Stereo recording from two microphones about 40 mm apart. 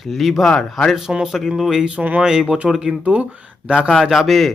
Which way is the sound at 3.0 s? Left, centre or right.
Right.